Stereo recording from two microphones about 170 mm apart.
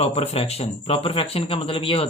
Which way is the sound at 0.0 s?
35° left (ahead or behind).